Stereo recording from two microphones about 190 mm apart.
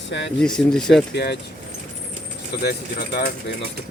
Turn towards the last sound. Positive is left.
turn(degrees=55)  # may be behind; listen again after turning